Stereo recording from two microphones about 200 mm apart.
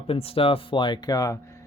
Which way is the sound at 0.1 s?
30° left (ahead or behind).